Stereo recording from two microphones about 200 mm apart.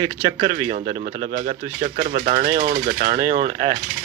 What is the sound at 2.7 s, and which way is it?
Speech, 35° right (ahead or behind).